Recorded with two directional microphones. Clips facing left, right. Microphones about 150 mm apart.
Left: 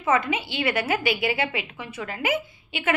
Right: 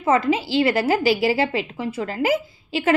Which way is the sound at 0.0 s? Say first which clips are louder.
Right 5 dB; 30° right (ahead or behind).